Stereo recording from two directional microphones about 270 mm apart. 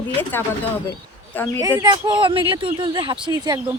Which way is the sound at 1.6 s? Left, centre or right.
Centre.